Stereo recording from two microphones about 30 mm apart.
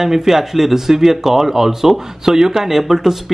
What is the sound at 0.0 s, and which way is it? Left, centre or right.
Speech, centre.